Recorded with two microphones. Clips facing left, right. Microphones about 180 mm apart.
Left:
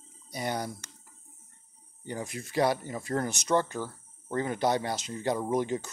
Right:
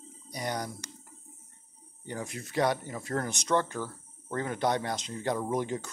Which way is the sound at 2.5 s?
10° left (ahead or behind).